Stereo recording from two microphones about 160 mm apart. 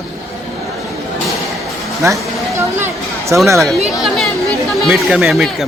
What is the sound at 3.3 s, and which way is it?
Speech, 15° right (ahead or behind).